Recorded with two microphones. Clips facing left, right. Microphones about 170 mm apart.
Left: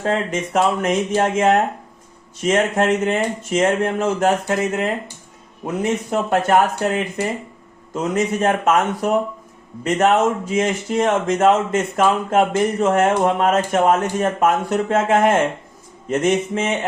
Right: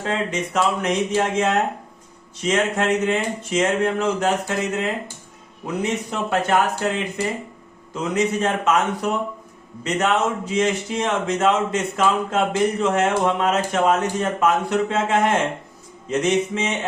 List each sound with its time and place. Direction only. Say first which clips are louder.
0.0 s speech: left 3 dB; 50° left (ahead or behind)